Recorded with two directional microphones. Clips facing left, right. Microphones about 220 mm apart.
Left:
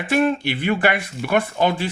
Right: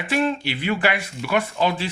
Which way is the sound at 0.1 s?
50° left (ahead or behind).